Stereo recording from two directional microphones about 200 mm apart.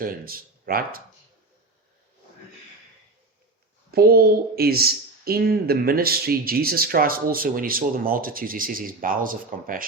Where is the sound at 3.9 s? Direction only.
50° right (ahead or behind).